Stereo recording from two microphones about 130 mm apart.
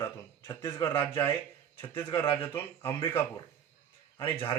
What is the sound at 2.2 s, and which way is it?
Speech, 15° left (ahead or behind).